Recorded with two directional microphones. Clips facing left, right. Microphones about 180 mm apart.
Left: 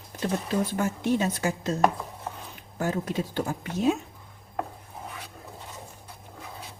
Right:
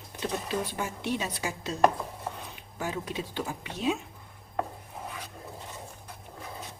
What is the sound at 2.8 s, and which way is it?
A woman's voice, 45° left (ahead or behind).